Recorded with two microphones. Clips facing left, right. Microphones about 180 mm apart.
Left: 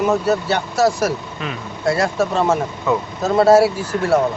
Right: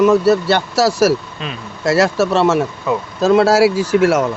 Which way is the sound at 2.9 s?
15° right (ahead or behind).